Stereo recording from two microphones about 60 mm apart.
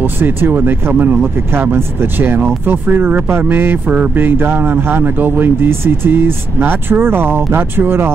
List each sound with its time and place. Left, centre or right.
0.0 s speech: right